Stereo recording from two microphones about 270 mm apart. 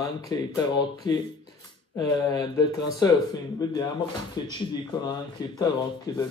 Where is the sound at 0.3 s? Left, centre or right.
Centre.